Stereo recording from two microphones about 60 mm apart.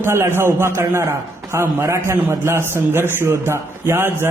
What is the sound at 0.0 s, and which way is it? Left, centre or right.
A man's voice, right.